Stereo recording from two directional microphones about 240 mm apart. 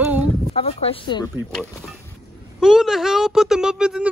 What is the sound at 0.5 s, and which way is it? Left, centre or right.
Speech, left.